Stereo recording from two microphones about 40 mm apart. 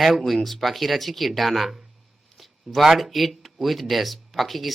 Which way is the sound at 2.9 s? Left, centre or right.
Centre.